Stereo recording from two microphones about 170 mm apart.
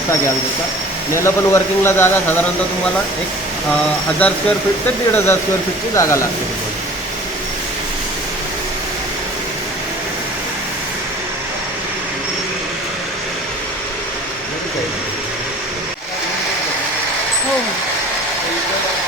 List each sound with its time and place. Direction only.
1.1 s speech: 15° left (ahead or behind)
4.2 s speech: 10° left (ahead or behind)